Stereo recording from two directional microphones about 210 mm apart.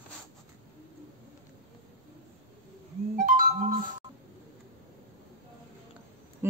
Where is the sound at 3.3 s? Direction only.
35° right (ahead or behind).